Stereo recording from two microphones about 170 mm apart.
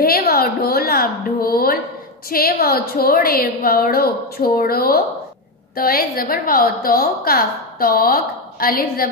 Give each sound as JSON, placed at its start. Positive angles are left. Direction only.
{"t": 0.0, "sound": "a woman's voice", "side_deg": 60}